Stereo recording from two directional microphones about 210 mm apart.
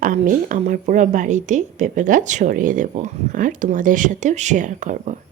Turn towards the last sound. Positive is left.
turn(degrees=-35)  # may be behind; listen again after turning